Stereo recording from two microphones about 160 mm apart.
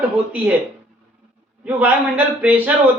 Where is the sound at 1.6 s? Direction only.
10° right (ahead or behind).